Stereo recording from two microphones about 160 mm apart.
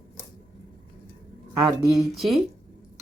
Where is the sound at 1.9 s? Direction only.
Centre (ahead or behind).